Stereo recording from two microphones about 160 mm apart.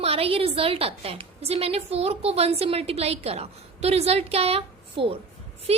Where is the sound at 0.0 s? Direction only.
40° right (ahead or behind).